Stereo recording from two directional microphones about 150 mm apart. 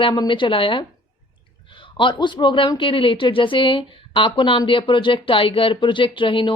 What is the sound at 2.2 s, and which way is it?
Speech, 30° left (ahead or behind).